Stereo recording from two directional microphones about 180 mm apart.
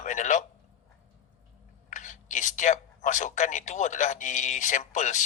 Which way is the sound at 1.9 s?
45° left (ahead or behind).